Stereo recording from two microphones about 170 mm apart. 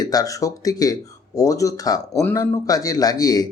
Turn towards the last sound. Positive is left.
turn(degrees=20)  # may be behind; listen again after turning